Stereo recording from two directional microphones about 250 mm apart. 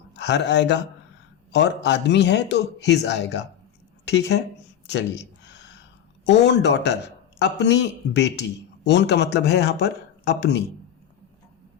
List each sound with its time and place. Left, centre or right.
0.2 s a man's voice: left
4.9 s a sound: left
6.2 s a man's voice: left